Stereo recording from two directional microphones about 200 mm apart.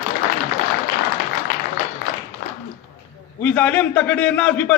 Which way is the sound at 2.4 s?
50° left (ahead or behind).